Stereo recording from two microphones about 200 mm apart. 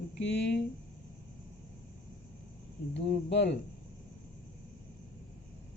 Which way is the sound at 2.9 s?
60° left (ahead or behind).